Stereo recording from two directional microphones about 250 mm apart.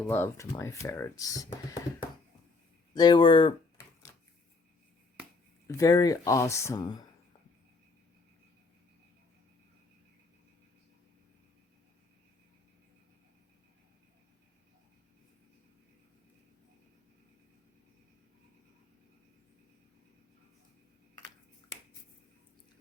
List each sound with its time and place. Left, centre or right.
0.0 s speech: centre
5.6 s speech: centre